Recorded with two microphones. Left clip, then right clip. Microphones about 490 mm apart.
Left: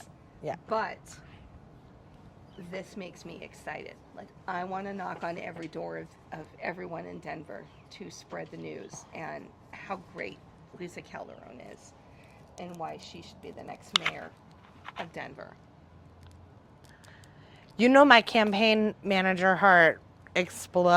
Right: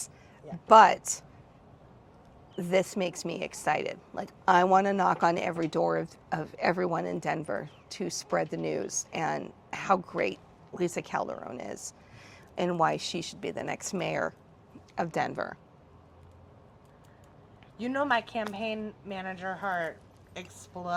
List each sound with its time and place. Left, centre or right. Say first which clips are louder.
0.7 s speech: right 16 dB; right
2.6 s a woman's voice: right 13 dB; right
12.5 s speech: right 12 dB; right
15.1 s a woman's voice: right 10 dB; right
17.7 s speech: left 10 dB; left